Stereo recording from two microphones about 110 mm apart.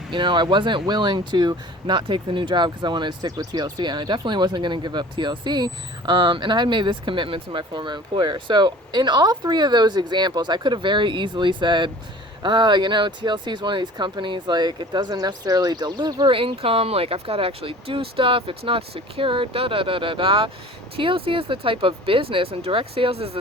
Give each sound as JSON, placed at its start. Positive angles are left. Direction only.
{"t": 0.1, "sound": "speech", "side_deg": -45}